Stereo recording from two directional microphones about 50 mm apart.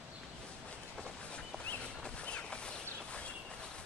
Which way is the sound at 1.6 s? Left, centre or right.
Left.